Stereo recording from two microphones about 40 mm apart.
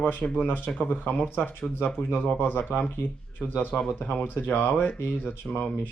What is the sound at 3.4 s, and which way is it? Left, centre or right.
Speech, right.